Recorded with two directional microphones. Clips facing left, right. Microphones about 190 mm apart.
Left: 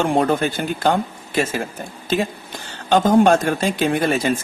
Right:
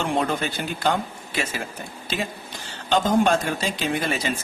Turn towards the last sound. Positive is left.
turn(degrees=50)  # may be behind; listen again after turning